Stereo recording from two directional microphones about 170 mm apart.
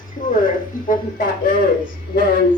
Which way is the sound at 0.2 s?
50° left (ahead or behind).